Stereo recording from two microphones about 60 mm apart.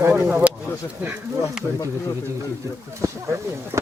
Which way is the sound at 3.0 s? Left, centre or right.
Right.